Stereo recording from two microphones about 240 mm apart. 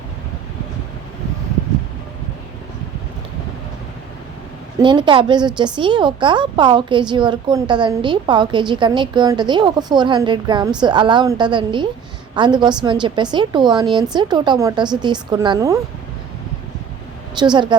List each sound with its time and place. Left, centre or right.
4.8 s a woman's voice: centre
17.4 s speech: centre